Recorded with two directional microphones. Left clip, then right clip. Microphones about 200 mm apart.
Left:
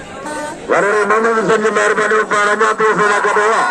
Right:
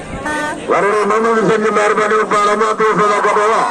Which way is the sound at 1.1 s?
30° left (ahead or behind).